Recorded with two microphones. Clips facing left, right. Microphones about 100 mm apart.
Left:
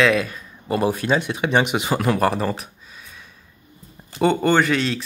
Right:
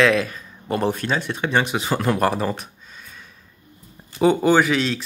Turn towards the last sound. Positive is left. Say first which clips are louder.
# right 1 dB
turn(degrees=0)  # may be behind; listen again after turning